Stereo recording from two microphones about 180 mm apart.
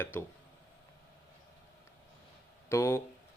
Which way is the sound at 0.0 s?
10° left (ahead or behind).